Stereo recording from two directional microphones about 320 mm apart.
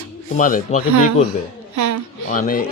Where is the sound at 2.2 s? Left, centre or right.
Left.